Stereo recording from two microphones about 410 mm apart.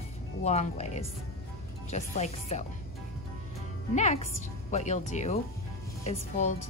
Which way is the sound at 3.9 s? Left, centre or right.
Centre.